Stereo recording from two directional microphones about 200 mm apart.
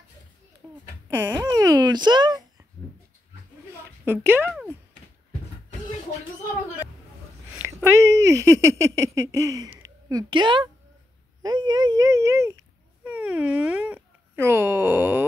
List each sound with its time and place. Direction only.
1.3 s a sound: 15° right (ahead or behind)
4.0 s speech: 10° right (ahead or behind)
7.8 s speech: 15° right (ahead or behind)